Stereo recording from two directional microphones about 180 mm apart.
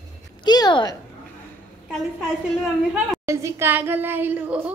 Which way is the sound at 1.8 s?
Centre (ahead or behind).